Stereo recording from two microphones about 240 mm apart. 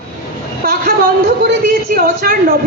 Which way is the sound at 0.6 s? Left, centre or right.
Right.